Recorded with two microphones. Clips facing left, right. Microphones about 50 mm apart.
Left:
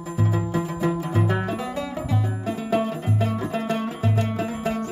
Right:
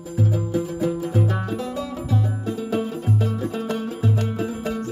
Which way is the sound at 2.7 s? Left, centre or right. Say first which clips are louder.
Left 2 dB; left.